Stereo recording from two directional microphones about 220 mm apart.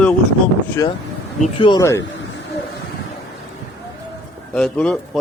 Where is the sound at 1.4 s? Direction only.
20° left (ahead or behind).